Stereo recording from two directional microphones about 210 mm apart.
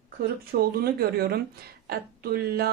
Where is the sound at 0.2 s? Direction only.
45° right (ahead or behind).